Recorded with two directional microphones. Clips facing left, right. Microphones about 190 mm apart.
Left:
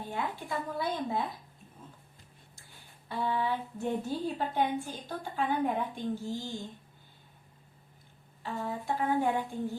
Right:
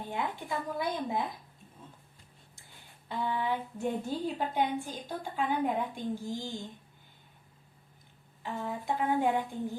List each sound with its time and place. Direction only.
0.0 s a woman's voice: 20° right (ahead or behind)
3.1 s a woman's voice: 15° right (ahead or behind)
8.4 s a woman's voice: 15° right (ahead or behind)